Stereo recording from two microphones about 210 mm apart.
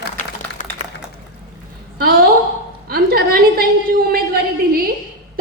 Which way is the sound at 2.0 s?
45° right (ahead or behind).